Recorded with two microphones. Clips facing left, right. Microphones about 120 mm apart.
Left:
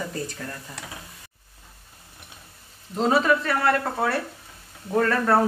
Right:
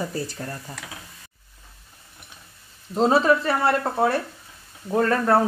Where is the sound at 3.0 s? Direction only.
30° right (ahead or behind).